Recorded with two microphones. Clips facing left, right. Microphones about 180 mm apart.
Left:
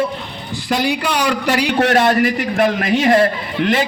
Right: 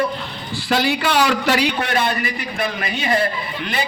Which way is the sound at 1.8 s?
90° left.